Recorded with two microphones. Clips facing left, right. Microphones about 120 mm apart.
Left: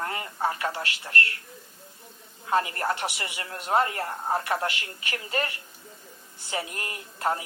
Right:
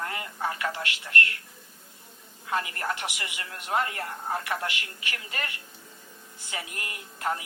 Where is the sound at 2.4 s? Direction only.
30° left (ahead or behind).